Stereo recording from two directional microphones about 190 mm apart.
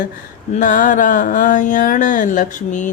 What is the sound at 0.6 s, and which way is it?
Speech, 45° left (ahead or behind).